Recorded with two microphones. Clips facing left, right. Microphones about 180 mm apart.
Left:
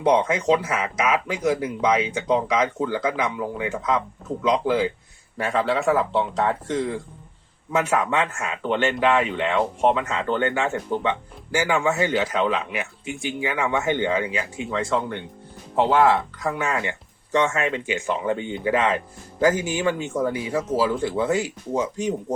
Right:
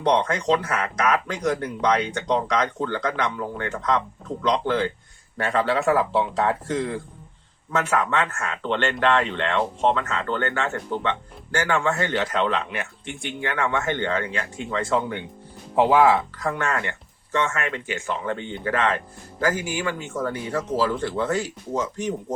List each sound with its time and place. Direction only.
0.0 s speech: 5° left (ahead or behind)
7.7 s speech: 15° left (ahead or behind)